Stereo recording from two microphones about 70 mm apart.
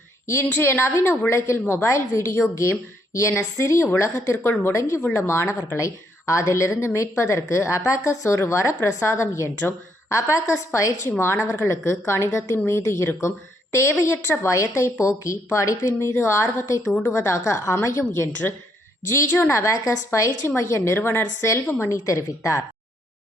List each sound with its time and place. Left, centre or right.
0.5 s a woman's voice: left
21.8 s a woman's voice: left